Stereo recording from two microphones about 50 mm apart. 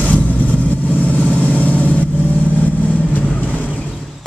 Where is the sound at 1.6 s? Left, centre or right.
Left.